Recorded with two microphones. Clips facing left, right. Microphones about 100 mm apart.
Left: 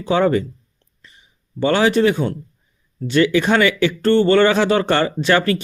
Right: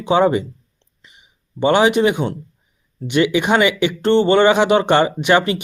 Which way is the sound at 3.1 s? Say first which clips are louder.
Even; 15° right (ahead or behind).